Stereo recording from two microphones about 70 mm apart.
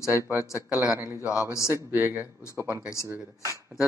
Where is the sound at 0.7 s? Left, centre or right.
Centre.